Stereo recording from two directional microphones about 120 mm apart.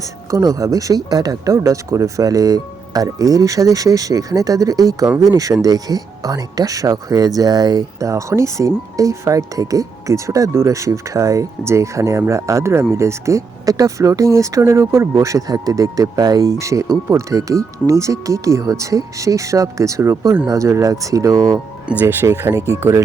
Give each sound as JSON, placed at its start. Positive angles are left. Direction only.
{"t": 0.3, "sound": "speech", "side_deg": -30}
{"t": 21.8, "sound": "speech", "side_deg": -15}